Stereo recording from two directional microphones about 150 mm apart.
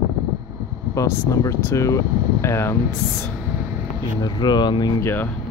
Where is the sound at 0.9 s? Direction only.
20° left (ahead or behind).